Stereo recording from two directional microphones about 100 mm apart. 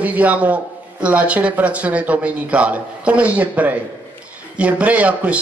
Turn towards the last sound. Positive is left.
turn(degrees=-15)  # may be behind; listen again after turning